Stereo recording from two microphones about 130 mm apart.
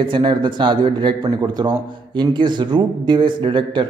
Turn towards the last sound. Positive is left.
turn(degrees=-40)  # may be behind; listen again after turning